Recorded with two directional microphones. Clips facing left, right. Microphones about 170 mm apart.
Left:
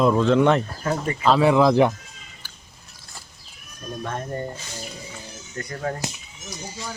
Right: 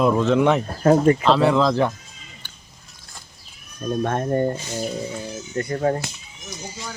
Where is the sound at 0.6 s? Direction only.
45° right (ahead or behind).